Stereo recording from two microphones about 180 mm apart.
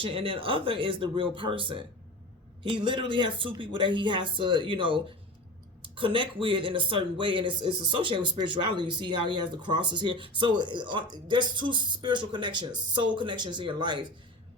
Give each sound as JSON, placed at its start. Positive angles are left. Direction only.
{"t": 0.0, "sound": "speech", "side_deg": -30}